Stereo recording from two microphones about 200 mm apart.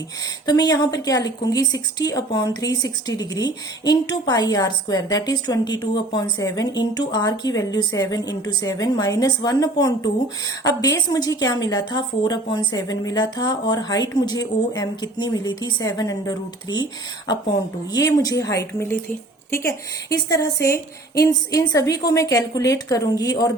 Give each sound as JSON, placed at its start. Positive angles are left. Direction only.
{"t": 0.4, "sound": "a woman's voice", "side_deg": 20}
{"t": 17.9, "sound": "a woman's voice", "side_deg": 20}